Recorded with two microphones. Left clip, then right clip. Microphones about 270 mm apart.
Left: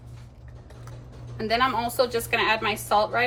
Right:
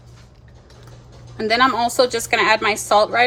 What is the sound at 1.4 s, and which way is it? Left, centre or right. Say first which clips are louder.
A woman's voice: right 7 dB; right.